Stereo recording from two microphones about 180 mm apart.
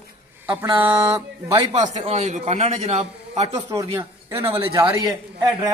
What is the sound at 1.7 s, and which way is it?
A man's voice, 40° right (ahead or behind).